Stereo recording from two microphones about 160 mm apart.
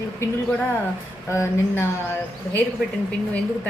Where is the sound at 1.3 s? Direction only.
15° left (ahead or behind).